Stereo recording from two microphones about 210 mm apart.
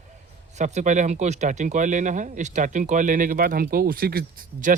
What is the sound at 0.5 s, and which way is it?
Speech, 35° right (ahead or behind).